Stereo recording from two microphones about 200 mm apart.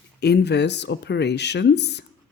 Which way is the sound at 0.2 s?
55° left (ahead or behind).